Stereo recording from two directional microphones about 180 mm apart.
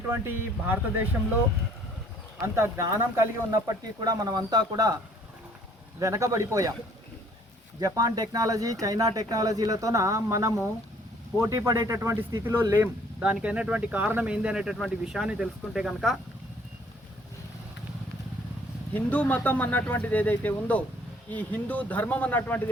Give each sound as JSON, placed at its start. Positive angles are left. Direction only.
{"t": 0.1, "sound": "speech", "side_deg": -10}
{"t": 2.4, "sound": "speech", "side_deg": -15}
{"t": 6.0, "sound": "speech", "side_deg": -15}
{"t": 7.8, "sound": "speech", "side_deg": -20}
{"t": 18.9, "sound": "speech", "side_deg": 10}